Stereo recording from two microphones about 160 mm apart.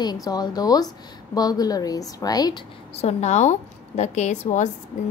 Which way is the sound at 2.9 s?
45° left (ahead or behind).